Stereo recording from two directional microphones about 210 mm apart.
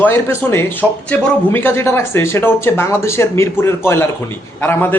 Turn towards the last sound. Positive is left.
turn(degrees=10)  # may be behind; listen again after turning